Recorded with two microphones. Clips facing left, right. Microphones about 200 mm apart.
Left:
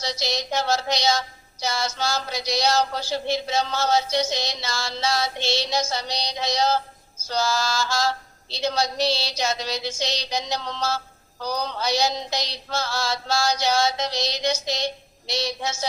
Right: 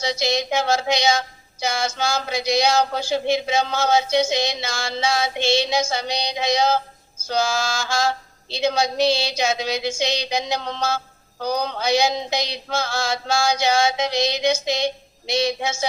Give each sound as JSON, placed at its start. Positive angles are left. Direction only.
{"t": 0.0, "sound": "speech", "side_deg": -55}